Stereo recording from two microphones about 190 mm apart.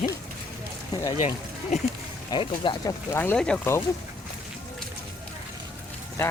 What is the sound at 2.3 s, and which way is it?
Speech, 25° left (ahead or behind).